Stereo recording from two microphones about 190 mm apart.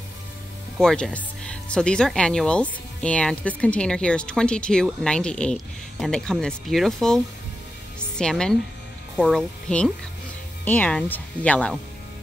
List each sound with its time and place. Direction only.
0.7 s speech: 5° left (ahead or behind)
8.2 s speech: 5° left (ahead or behind)